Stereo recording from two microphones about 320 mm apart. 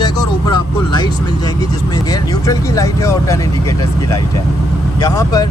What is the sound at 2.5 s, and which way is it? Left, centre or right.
Speech, centre.